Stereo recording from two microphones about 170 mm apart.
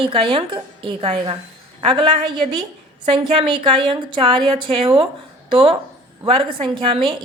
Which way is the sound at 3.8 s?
30° right (ahead or behind).